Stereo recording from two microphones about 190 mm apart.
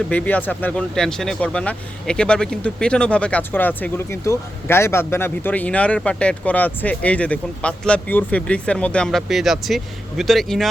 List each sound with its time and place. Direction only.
0.1 s speech: 10° left (ahead or behind)